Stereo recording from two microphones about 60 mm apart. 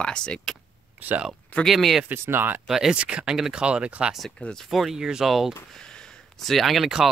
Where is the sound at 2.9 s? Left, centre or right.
Centre.